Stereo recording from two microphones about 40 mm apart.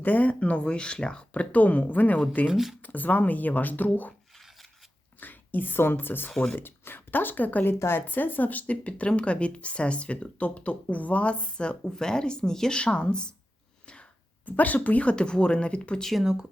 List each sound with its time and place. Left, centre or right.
0.0 s speech: left
1.5 s speech: left
5.2 s speech: left
7.6 s speech: left
8.0 s speech: left
8.6 s speech: left
14.4 s speech: left
15.1 s speech: left
16.2 s speech: centre